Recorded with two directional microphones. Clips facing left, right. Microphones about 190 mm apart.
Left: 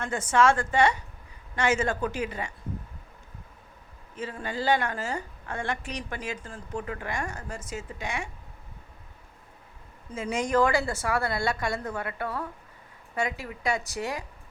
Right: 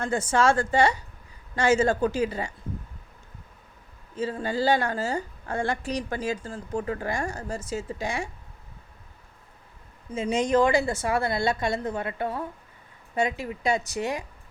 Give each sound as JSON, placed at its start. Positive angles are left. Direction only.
{"t": 0.0, "sound": "a woman's voice", "side_deg": -30}
{"t": 4.1, "sound": "a woman's voice", "side_deg": -30}
{"t": 10.2, "sound": "a woman's voice", "side_deg": -20}